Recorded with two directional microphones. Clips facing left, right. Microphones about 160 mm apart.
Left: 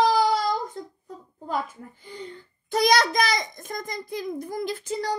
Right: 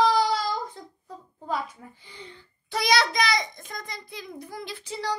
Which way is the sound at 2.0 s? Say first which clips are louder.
Left 7 dB; 45° left (ahead or behind).